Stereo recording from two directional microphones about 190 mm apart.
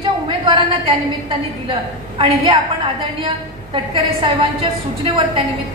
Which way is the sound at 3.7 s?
25° right (ahead or behind).